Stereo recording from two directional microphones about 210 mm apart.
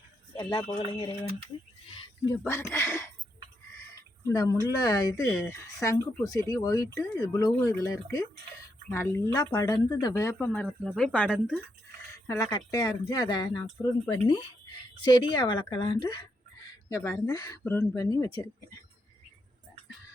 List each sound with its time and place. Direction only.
0.3 s speech: 20° left (ahead or behind)
2.4 s speech: 10° left (ahead or behind)
4.3 s speech: 15° left (ahead or behind)
5.2 s speech: centre (ahead or behind)
5.5 s speech: 15° left (ahead or behind)
12.1 s speech: 15° left (ahead or behind)